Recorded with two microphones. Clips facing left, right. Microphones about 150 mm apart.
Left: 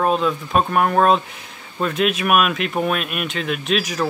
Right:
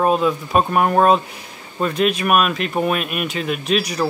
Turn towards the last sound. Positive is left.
turn(degrees=0)  # may be behind; listen again after turning